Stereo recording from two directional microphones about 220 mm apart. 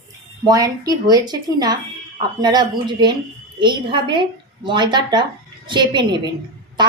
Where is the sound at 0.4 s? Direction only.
15° right (ahead or behind).